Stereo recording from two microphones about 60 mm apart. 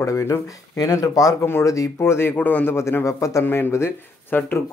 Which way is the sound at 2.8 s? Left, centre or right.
Left.